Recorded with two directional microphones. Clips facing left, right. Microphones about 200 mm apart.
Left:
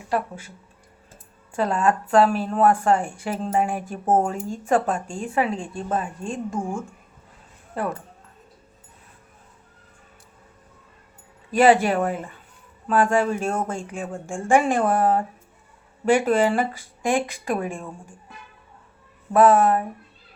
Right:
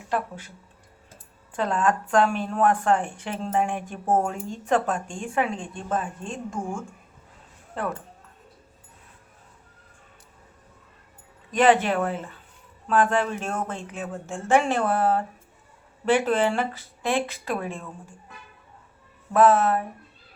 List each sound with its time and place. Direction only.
0.1 s speech: 10° left (ahead or behind)
1.5 s speech: 10° left (ahead or behind)
11.5 s speech: 10° left (ahead or behind)
19.3 s speech: 10° left (ahead or behind)